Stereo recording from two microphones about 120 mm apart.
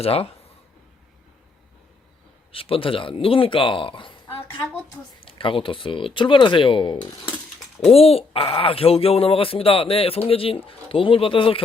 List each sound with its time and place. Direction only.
0.0 s speech: 55° left (ahead or behind)
2.5 s speech: 50° left (ahead or behind)
5.2 s speech: 45° left (ahead or behind)